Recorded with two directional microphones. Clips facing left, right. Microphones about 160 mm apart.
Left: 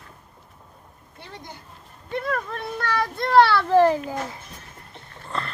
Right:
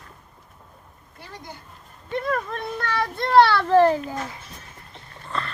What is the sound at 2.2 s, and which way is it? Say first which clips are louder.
Children playing: right 2 dB; 15° right (ahead or behind).